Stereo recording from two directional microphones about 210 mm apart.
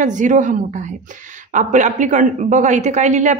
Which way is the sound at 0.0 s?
35° right (ahead or behind).